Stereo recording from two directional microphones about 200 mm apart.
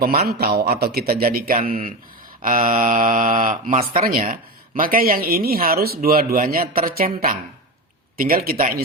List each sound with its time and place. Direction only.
0.0 s speech: 50° right (ahead or behind)